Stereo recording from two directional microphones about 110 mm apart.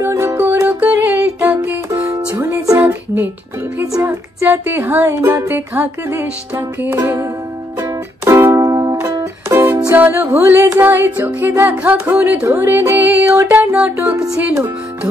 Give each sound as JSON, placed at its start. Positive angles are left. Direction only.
{"t": 0.0, "sound": "music", "side_deg": -25}
{"t": 2.8, "sound": "child singing", "side_deg": -20}
{"t": 4.0, "sound": "speech", "side_deg": -20}
{"t": 7.8, "sound": "music", "side_deg": -25}
{"t": 9.5, "sound": "music", "side_deg": -20}
{"t": 14.1, "sound": "speech", "side_deg": -30}